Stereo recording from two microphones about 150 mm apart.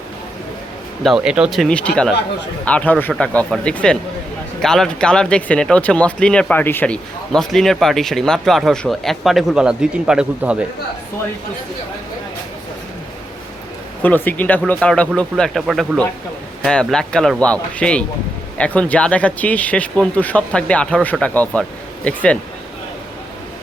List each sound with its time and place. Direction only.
1.0 s speech: 5° right (ahead or behind)
14.0 s speech: 10° left (ahead or behind)